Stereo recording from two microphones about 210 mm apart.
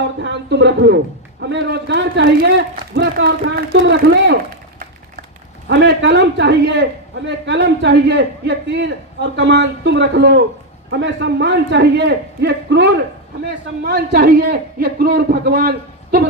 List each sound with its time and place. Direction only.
0.2 s a man's voice: 55° right (ahead or behind)
5.6 s a man's voice: 55° right (ahead or behind)